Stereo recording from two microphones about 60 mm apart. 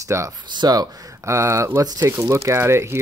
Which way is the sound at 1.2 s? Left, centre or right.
Right.